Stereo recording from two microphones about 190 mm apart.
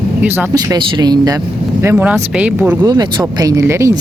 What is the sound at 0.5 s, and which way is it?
Speech, 20° right (ahead or behind).